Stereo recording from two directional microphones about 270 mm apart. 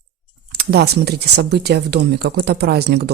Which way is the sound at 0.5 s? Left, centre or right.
Right.